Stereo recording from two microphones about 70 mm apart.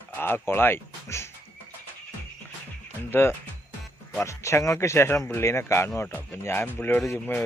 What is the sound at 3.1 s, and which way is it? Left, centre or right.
Speech, left.